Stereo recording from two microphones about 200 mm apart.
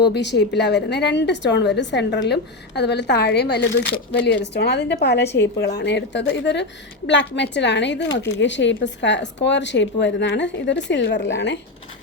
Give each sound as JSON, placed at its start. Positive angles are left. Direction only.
{"t": 0.0, "sound": "a woman's voice", "side_deg": 55}